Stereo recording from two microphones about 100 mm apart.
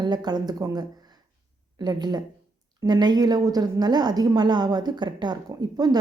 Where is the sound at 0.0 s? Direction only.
45° right (ahead or behind).